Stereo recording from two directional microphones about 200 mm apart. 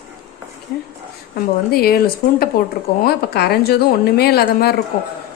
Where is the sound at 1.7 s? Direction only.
50° left (ahead or behind).